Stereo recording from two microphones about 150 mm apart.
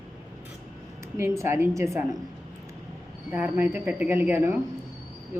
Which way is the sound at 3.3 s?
15° right (ahead or behind).